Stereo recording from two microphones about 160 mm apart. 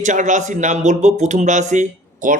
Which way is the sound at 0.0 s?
50° right (ahead or behind).